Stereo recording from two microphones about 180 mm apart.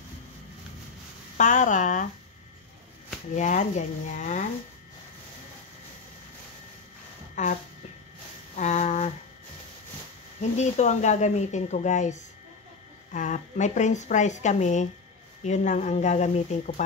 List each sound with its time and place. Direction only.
1.3 s speech: 45° left (ahead or behind)
3.3 s speech: 45° left (ahead or behind)
7.4 s speech: 40° left (ahead or behind)
8.5 s a sound: 40° left (ahead or behind)
10.5 s speech: 40° left (ahead or behind)